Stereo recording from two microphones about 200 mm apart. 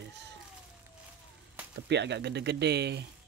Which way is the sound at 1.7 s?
60° right (ahead or behind).